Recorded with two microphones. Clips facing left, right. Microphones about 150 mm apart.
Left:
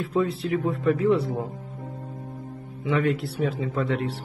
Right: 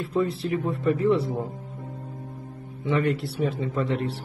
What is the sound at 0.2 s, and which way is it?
Speech, 30° right (ahead or behind).